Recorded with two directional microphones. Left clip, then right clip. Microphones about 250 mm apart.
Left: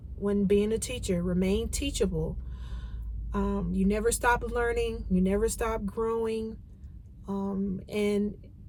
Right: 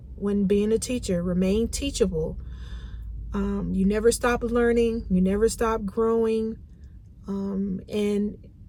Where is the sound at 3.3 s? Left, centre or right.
Centre.